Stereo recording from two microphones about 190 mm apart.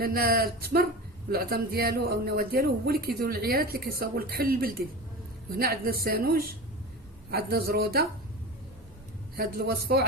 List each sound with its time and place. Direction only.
0.0 s speech: 50° right (ahead or behind)
9.3 s speech: 55° right (ahead or behind)